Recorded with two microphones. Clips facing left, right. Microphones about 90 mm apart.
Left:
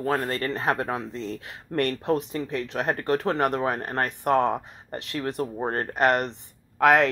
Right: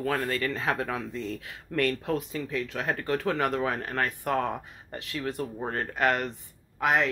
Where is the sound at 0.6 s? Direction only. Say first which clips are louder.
Left 3 dB; 50° left (ahead or behind).